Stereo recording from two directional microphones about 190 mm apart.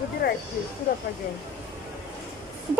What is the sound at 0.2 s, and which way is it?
Speech, 50° left (ahead or behind).